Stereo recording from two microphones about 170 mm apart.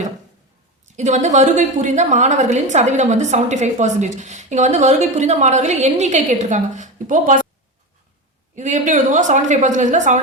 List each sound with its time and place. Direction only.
0.9 s a woman's voice: 45° right (ahead or behind)
8.5 s a woman's voice: 45° right (ahead or behind)